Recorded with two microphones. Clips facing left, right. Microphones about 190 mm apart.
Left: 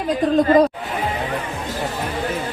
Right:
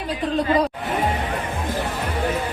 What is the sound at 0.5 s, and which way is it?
Speech, 45° left (ahead or behind).